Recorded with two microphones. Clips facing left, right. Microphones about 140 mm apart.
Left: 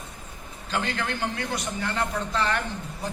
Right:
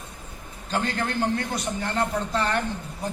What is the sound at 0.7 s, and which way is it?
A man's voice, 35° right (ahead or behind).